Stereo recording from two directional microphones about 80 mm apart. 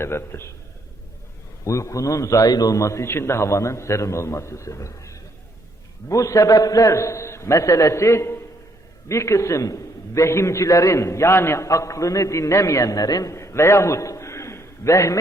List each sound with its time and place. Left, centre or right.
0.0 s a man's voice: left
1.6 s a man's voice: left
13.3 s a sound: left